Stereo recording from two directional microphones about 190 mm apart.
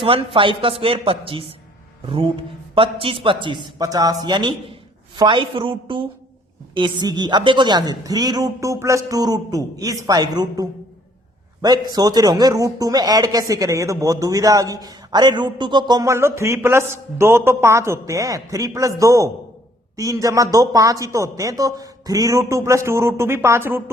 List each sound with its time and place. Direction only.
0.0 s a man's voice: 25° right (ahead or behind); by 23.8 s 10° right (ahead or behind)